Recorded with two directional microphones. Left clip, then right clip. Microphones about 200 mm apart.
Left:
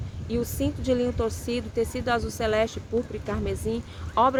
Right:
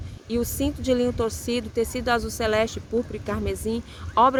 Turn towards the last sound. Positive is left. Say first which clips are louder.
# right 3 dB
turn(degrees=-30)  # may be behind; listen again after turning